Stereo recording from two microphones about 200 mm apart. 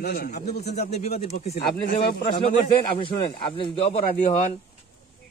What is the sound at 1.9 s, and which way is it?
Speech, 50° left (ahead or behind).